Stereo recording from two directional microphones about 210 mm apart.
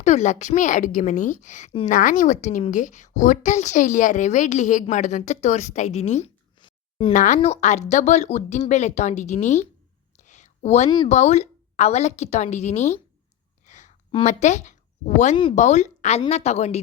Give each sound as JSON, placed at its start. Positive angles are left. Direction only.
{"t": 0.0, "sound": "a woman's voice", "side_deg": 35}
{"t": 7.1, "sound": "a woman's voice", "side_deg": 35}
{"t": 10.2, "sound": "a sound", "side_deg": 35}
{"t": 10.8, "sound": "speech", "side_deg": 20}
{"t": 11.1, "sound": "a woman's voice", "side_deg": 30}
{"t": 13.7, "sound": "a sound", "side_deg": 35}
{"t": 15.4, "sound": "a woman's voice", "side_deg": 30}